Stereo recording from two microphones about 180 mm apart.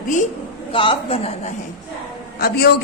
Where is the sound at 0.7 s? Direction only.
30° left (ahead or behind).